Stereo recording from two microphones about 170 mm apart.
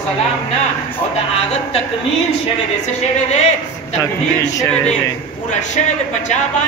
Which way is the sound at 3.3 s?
40° left (ahead or behind).